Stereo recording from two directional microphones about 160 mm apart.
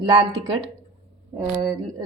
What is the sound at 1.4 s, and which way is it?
Speech, 25° right (ahead or behind).